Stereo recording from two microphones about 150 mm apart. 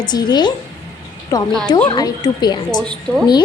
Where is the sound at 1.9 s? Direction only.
25° left (ahead or behind).